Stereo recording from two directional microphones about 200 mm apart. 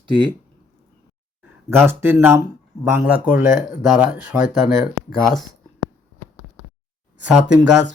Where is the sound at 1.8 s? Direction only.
10° right (ahead or behind).